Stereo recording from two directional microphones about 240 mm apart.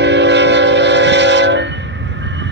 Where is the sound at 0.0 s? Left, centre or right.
Right.